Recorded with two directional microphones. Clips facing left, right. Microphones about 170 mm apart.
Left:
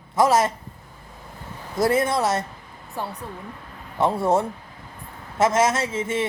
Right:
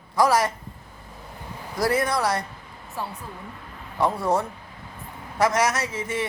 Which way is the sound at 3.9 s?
25° left (ahead or behind).